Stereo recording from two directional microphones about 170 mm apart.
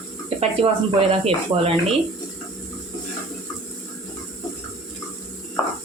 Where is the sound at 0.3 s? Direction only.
35° right (ahead or behind).